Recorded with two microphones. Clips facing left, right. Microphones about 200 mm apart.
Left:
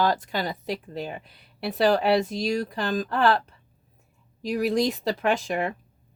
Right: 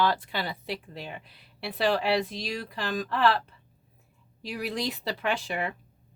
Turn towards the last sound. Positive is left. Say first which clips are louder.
# left 5 dB
turn(degrees=45)  # may be behind; listen again after turning